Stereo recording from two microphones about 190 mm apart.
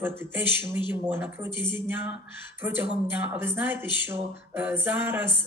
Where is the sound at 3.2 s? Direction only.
10° right (ahead or behind).